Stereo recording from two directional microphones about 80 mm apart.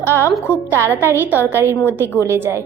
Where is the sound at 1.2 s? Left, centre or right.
Right.